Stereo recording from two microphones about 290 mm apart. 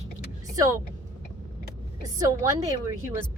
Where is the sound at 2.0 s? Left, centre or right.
Centre.